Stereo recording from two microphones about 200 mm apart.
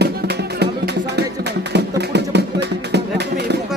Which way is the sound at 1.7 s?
60° right (ahead or behind).